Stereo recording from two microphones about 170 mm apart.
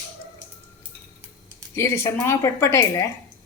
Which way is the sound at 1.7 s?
15° left (ahead or behind).